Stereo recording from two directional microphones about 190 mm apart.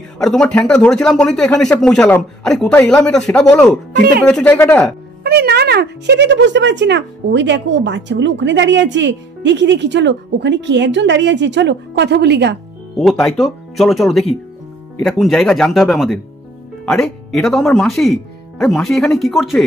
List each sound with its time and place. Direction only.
0.2 s speech: 5° left (ahead or behind)
3.9 s speech: 50° right (ahead or behind)
4.3 s speech: 5° left (ahead or behind)
5.2 s speech: 55° right (ahead or behind)
12.9 s speech: centre (ahead or behind)